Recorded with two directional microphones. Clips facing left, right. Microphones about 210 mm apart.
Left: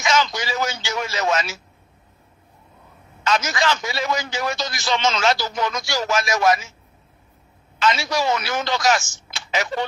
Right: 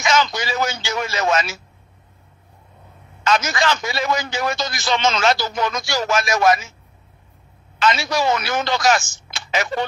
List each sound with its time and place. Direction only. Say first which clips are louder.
0.0 s a sound: right 2 dB; 55° right (ahead or behind)
3.3 s a man's voice: right 2 dB; 55° right (ahead or behind)
7.8 s a man's voice: right 2 dB; 60° right (ahead or behind)